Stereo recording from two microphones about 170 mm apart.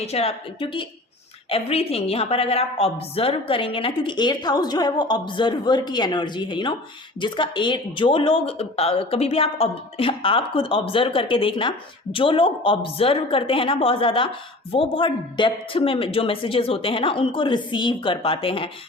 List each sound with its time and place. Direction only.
0.0 s a woman's voice: 35° left (ahead or behind)